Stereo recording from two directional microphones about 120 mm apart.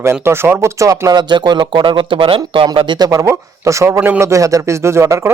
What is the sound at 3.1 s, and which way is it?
Speech, 25° right (ahead or behind).